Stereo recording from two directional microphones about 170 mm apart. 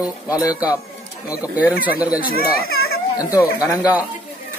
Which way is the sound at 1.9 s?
10° right (ahead or behind).